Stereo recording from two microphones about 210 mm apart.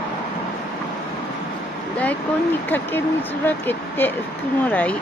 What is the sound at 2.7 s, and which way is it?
Speech, 10° left (ahead or behind).